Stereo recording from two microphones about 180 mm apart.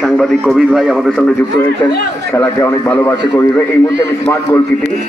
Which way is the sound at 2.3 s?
15° left (ahead or behind).